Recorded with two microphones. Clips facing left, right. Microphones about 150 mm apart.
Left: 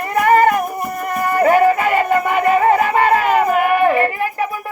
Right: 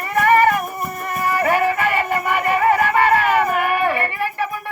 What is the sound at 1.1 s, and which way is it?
Music, 25° left (ahead or behind).